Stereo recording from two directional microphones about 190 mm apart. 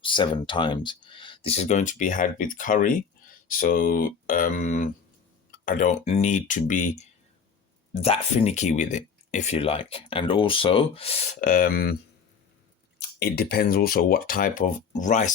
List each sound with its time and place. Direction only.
0.0 s speech: 25° left (ahead or behind)
11.3 s speech: 45° left (ahead or behind)
13.0 s speech: 60° left (ahead or behind); by 15.3 s 40° left (ahead or behind)